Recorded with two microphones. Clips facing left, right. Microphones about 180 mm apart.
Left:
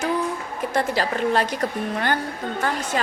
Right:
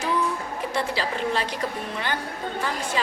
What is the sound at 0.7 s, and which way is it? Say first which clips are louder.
Speech: left 5 dB; 50° left (ahead or behind).